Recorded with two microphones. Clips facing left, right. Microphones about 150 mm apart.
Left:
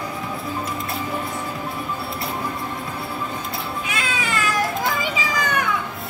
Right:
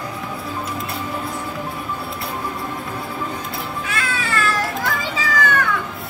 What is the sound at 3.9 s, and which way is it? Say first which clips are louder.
Children playing: right 2 dB; 20° left (ahead or behind).